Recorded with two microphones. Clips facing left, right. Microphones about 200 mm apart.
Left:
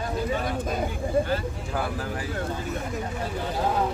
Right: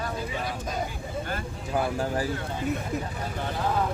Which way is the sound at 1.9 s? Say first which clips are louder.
Right 4 dB; 35° right (ahead or behind).